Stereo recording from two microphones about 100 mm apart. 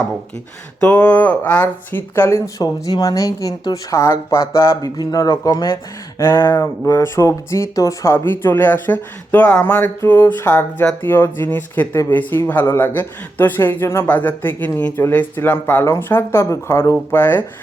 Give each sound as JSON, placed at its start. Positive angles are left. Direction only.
{"t": 0.8, "sound": "speech", "side_deg": 15}
{"t": 2.8, "sound": "speech", "side_deg": 40}
{"t": 5.7, "sound": "speech", "side_deg": 25}